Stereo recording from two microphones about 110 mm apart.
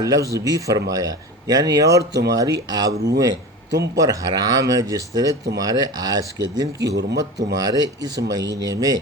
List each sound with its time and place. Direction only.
0.0 s speech: 30° right (ahead or behind)